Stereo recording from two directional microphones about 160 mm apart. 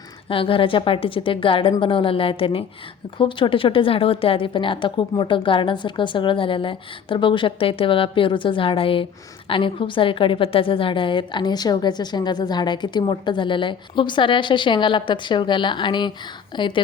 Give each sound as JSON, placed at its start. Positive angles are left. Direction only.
{"t": 0.3, "sound": "a woman's voice", "side_deg": 35}